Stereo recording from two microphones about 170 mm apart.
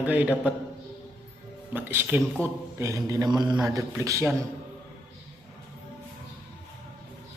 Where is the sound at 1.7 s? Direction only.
10° right (ahead or behind).